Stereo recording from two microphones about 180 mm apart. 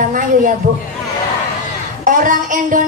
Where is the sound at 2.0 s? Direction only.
45° right (ahead or behind).